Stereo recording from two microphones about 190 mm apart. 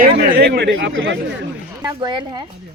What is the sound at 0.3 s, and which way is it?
Speech, 55° right (ahead or behind).